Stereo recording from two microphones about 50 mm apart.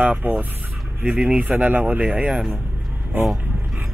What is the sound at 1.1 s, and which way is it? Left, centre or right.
Speech, centre.